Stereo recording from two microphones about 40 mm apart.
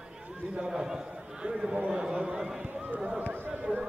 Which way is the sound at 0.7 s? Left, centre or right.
Centre.